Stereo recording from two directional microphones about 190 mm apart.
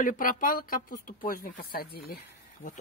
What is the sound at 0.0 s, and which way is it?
Speech, 45° left (ahead or behind).